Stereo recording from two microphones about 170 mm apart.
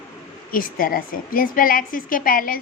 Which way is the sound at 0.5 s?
55° left (ahead or behind).